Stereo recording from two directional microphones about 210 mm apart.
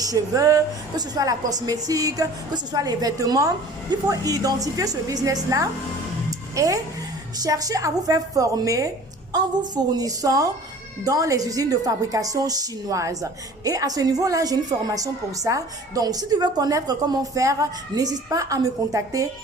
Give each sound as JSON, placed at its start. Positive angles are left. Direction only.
{"t": 0.0, "sound": "a woman's voice", "side_deg": -15}